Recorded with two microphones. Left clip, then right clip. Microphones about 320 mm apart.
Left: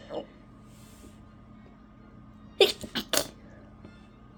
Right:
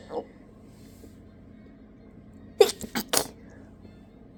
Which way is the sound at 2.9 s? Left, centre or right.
Right.